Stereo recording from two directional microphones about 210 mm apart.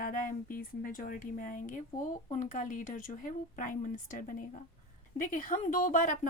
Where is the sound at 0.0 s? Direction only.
40° left (ahead or behind).